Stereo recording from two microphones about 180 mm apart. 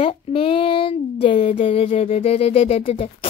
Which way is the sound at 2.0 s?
30° left (ahead or behind).